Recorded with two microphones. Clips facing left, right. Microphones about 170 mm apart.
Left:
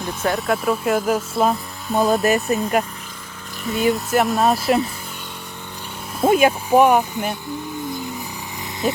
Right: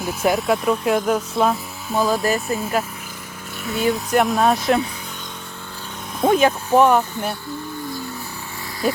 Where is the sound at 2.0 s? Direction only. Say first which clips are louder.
Left 3 dB; 20° left (ahead or behind).